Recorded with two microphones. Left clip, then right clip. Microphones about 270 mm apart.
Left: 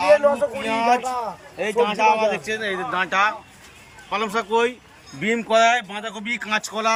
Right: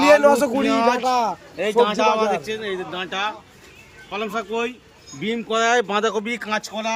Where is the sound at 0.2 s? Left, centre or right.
Right.